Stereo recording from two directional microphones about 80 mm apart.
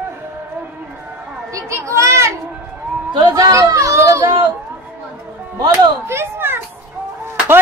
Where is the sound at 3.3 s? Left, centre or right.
Right.